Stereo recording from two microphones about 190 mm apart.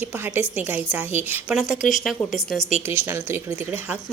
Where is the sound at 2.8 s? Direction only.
10° right (ahead or behind).